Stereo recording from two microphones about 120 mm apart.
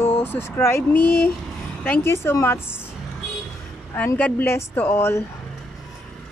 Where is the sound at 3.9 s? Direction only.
15° left (ahead or behind).